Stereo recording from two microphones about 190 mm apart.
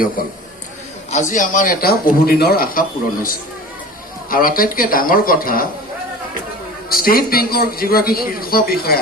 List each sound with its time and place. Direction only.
0.2 s a man's voice: 50° left (ahead or behind)
4.3 s a man's voice: 50° left (ahead or behind)
6.9 s a man's voice: 50° left (ahead or behind)